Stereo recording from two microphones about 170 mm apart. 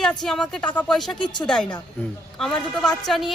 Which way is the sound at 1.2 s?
25° left (ahead or behind).